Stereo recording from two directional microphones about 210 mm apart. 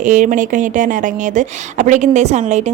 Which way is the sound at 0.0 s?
40° right (ahead or behind).